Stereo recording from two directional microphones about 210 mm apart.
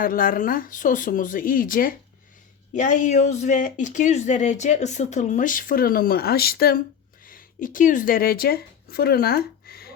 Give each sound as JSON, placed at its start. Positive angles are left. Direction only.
{"t": 0.0, "sound": "speech", "side_deg": 40}